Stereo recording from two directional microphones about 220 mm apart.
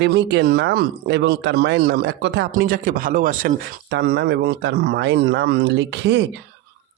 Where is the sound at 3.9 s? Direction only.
50° right (ahead or behind).